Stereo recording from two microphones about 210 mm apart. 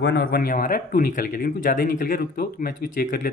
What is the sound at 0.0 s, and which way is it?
Speech, 50° left (ahead or behind).